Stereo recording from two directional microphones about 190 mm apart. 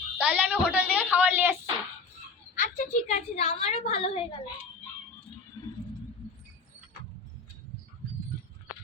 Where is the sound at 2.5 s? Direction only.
45° left (ahead or behind).